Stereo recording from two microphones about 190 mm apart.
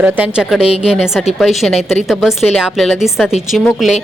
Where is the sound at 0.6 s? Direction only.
30° left (ahead or behind).